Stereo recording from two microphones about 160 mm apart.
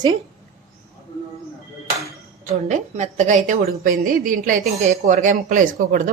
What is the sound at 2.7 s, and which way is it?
A woman's voice, 50° right (ahead or behind).